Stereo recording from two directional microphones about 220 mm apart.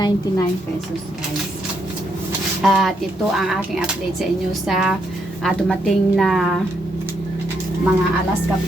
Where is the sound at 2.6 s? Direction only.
Centre (ahead or behind).